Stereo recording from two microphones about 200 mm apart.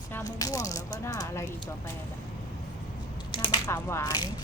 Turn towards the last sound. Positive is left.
turn(degrees=20)  # may be behind; listen again after turning